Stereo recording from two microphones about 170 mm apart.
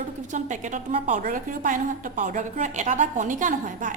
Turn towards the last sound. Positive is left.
turn(degrees=-50)  # may be behind; listen again after turning